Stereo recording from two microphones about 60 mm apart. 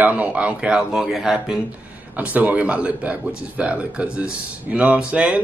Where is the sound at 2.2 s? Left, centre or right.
Right.